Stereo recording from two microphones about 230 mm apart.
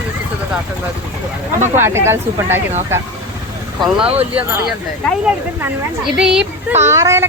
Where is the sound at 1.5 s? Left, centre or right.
Right.